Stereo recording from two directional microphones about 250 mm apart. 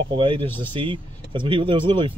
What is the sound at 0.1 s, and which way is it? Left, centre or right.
Speech, right.